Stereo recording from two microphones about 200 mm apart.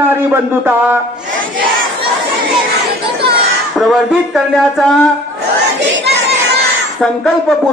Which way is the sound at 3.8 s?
Centre (ahead or behind).